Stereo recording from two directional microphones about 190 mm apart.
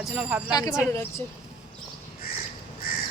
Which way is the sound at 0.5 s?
20° left (ahead or behind).